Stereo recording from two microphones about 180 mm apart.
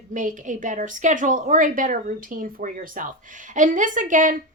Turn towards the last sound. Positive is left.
turn(degrees=-45)  # may be behind; listen again after turning